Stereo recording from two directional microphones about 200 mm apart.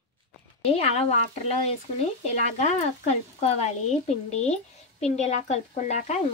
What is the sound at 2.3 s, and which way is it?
Speech, 35° left (ahead or behind).